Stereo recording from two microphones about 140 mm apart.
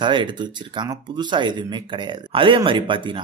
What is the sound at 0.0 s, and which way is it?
Speech, 35° right (ahead or behind).